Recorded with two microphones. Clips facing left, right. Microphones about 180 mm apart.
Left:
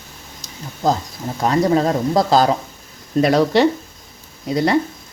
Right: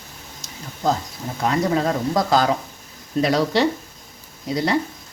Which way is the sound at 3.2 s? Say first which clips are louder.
Left 4 dB; 55° left (ahead or behind).